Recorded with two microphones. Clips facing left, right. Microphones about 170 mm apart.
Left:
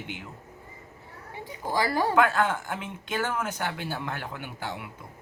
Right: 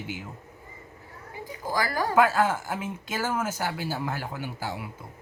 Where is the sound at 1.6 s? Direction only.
25° left (ahead or behind).